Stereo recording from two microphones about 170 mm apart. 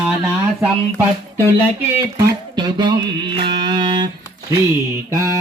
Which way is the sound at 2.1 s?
20° right (ahead or behind).